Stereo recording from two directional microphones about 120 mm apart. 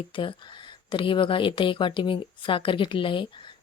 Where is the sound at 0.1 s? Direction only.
45° left (ahead or behind).